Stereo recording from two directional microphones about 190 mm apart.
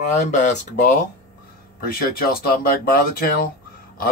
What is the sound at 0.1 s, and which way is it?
Speech, 40° left (ahead or behind).